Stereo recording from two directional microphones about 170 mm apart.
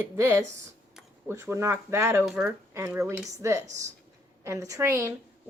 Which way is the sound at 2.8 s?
10° right (ahead or behind).